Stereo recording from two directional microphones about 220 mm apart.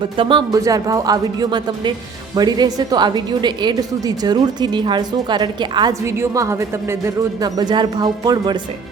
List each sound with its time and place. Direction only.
0.2 s a woman's voice: 20° right (ahead or behind)